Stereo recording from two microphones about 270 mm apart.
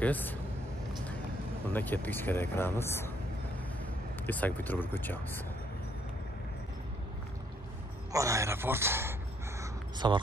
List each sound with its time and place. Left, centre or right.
0.0 s speech: centre
1.7 s speech: centre
4.3 s speech: centre
8.1 s speech: centre
9.6 s a sound: centre